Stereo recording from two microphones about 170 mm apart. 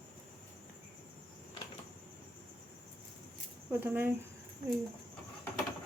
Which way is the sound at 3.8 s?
10° right (ahead or behind).